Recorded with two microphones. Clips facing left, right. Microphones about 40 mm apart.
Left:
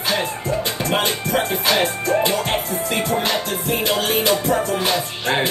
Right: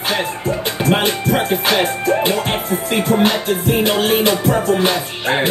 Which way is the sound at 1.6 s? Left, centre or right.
Right.